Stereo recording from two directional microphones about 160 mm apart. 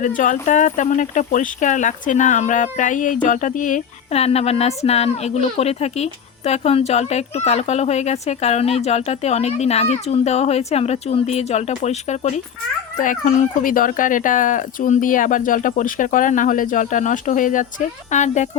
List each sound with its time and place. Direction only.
0.0 s speech: 55° left (ahead or behind)
13.0 s speech: 55° left (ahead or behind)